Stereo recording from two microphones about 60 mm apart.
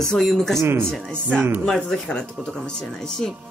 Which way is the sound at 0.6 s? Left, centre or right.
Right.